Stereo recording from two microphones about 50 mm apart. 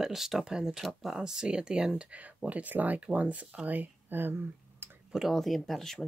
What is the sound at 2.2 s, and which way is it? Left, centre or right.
Speech, right.